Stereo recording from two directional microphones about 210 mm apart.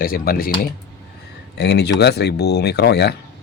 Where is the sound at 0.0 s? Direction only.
45° left (ahead or behind).